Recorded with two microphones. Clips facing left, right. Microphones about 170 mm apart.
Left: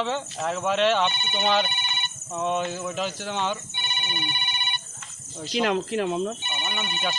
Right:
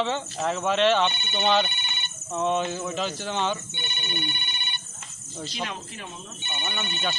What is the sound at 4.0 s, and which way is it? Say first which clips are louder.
Telephone: right 1 dB; 55° left (ahead or behind).